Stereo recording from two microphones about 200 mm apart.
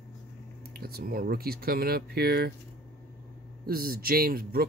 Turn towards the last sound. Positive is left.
turn(degrees=-50)  # may be behind; listen again after turning